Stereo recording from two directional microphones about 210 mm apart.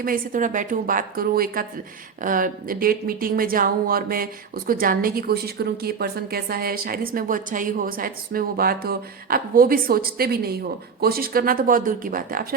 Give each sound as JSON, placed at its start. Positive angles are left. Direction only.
{"t": 0.0, "sound": "a woman's voice", "side_deg": -40}